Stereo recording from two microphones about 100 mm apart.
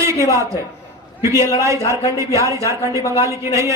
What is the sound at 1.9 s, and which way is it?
A man's voice, 30° right (ahead or behind).